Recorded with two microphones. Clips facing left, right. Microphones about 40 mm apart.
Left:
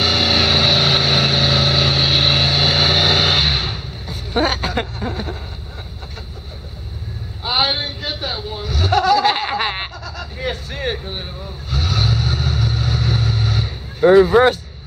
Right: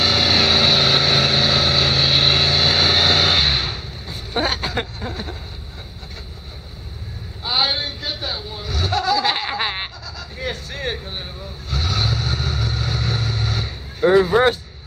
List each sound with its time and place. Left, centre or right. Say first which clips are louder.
0.0 s vehicle: left 1 dB; centre
7.4 s a sound: left 2 dB; centre
8.6 s a sound: left 2 dB; centre
8.9 s snicker: left 5 dB; left
9.2 s laughter: left 4 dB; centre
10.3 s vehicle: left 2 dB; centre